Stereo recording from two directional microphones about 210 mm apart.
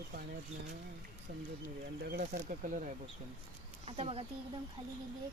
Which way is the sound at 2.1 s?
40° right (ahead or behind).